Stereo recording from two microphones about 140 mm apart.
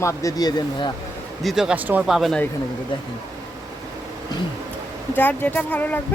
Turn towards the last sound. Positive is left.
turn(degrees=10)  # may be behind; listen again after turning